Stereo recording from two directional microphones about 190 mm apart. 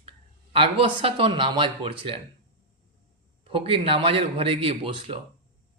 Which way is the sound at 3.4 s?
30° right (ahead or behind).